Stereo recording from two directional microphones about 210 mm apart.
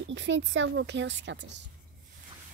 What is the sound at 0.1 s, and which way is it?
Speech, 60° right (ahead or behind).